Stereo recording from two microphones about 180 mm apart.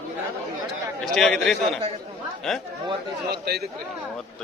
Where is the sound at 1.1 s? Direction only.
Centre (ahead or behind).